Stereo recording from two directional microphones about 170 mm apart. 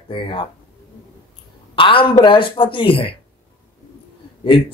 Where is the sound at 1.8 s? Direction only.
30° left (ahead or behind).